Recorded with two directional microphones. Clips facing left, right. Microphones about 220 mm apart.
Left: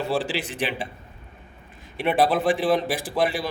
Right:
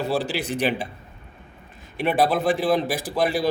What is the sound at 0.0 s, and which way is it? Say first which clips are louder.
Speech: right 1 dB; 40° right (ahead or behind).